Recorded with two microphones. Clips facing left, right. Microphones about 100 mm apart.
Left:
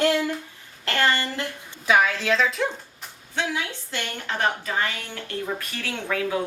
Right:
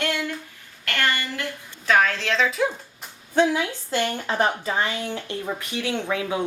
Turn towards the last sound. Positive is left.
turn(degrees=-20)  # may be behind; listen again after turning